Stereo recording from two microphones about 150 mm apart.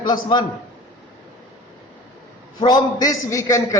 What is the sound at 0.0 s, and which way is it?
Speech, 30° left (ahead or behind).